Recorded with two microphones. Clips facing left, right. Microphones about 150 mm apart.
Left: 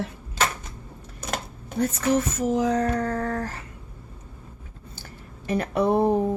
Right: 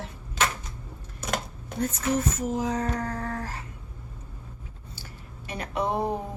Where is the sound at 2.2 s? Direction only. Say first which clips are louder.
Left 4 dB; 90° left.